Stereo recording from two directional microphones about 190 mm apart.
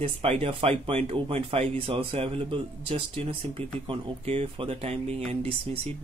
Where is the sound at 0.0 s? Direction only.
30° right (ahead or behind).